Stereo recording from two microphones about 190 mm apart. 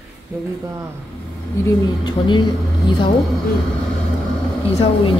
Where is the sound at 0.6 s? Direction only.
15° right (ahead or behind).